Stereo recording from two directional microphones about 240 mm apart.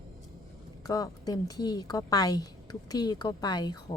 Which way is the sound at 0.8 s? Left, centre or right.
Centre.